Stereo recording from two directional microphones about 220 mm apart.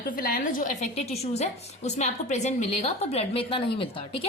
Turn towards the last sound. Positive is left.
turn(degrees=25)  # may be behind; listen again after turning